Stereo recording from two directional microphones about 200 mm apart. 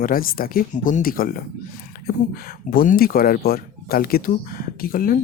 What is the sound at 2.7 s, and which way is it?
Speech, 45° left (ahead or behind).